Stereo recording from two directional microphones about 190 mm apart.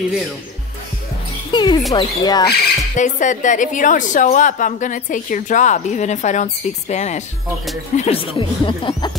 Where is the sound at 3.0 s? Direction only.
40° left (ahead or behind).